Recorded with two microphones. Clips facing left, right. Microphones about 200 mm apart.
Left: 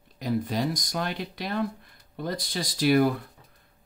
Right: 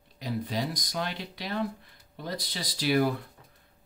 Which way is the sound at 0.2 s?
50° left (ahead or behind).